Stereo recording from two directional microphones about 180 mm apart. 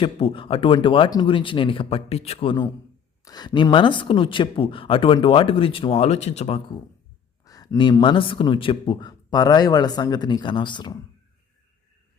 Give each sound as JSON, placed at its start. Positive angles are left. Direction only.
{"t": 0.0, "sound": "a man's voice", "side_deg": 30}
{"t": 7.4, "sound": "a man's voice", "side_deg": 20}